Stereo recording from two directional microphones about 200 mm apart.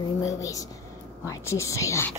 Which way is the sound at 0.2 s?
15° left (ahead or behind).